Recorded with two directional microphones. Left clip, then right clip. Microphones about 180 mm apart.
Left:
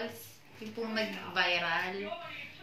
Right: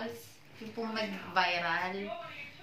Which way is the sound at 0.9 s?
65° right (ahead or behind).